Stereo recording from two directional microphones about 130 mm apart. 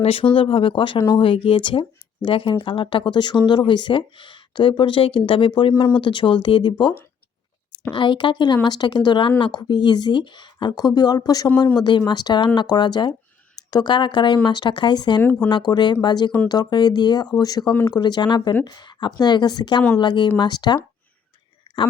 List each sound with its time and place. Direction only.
0.0 s speech: 45° left (ahead or behind)
7.9 s speech: 40° left (ahead or behind)